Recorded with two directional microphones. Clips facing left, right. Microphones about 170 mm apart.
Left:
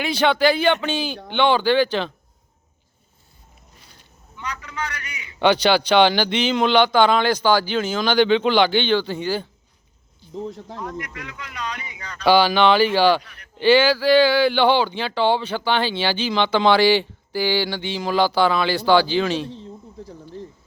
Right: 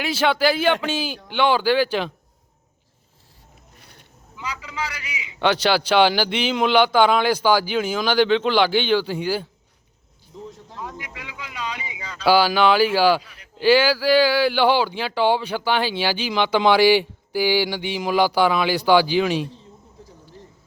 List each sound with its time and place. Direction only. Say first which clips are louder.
0.0 s a man's voice: left 2 dB; 5° right (ahead or behind)
3.8 s a sound: right 2 dB; 60° right (ahead or behind)
4.4 s a man's voice: even; 5° right (ahead or behind)
10.8 s speech: right 1 dB; 10° right (ahead or behind)